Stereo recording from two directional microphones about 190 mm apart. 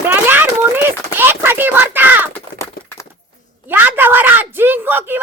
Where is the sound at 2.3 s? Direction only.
15° left (ahead or behind).